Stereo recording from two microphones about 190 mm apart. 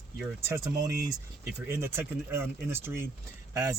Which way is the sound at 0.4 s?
15° right (ahead or behind).